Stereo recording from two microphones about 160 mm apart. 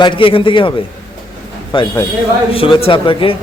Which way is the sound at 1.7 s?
30° left (ahead or behind).